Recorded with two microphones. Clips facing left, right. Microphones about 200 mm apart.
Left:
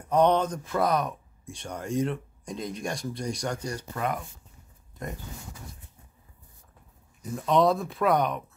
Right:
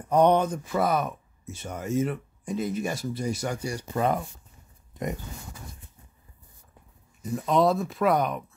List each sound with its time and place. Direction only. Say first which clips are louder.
0.1 s speech: right 2 dB; 10° right (ahead or behind)
3.9 s speech: right 6 dB; 30° right (ahead or behind)
7.2 s speech: even; centre (ahead or behind)